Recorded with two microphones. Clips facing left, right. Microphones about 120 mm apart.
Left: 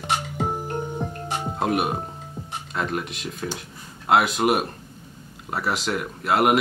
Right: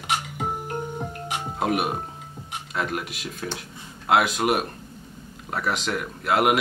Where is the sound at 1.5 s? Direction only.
Centre (ahead or behind).